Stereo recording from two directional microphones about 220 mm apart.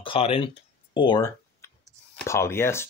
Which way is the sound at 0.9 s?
20° left (ahead or behind).